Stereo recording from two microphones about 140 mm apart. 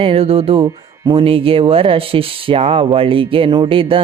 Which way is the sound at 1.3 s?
40° right (ahead or behind).